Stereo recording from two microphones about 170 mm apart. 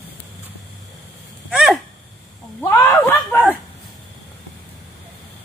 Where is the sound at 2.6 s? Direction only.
15° left (ahead or behind).